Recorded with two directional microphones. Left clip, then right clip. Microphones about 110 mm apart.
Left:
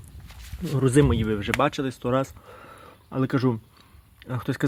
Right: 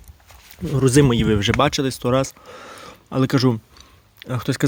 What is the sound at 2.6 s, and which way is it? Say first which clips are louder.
Speech: right 8 dB; 50° right (ahead or behind).